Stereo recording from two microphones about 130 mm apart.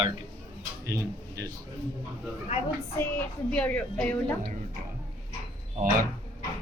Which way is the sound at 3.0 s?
15° left (ahead or behind).